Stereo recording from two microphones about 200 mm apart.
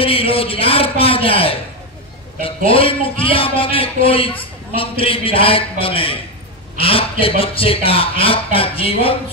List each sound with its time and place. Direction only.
0.0 s a man's voice: 30° left (ahead or behind)